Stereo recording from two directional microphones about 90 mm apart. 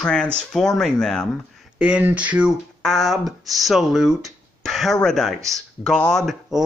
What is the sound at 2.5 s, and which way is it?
Speech, centre (ahead or behind).